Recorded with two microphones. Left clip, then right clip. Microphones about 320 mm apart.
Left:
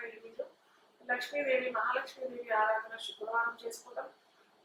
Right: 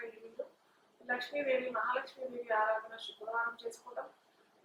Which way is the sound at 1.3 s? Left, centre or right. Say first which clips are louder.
Left 2 dB; centre.